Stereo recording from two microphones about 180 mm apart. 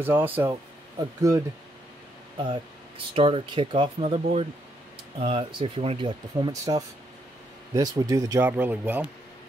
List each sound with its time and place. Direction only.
0.0 s speech: 10° right (ahead or behind)